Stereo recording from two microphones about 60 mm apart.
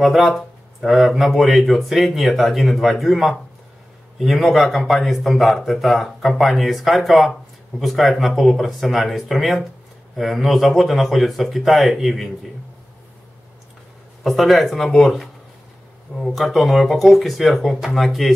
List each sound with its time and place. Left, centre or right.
0.0 s speech: centre
14.2 s speech: centre